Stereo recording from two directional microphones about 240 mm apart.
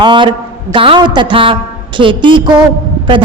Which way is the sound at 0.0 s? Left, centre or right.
Centre.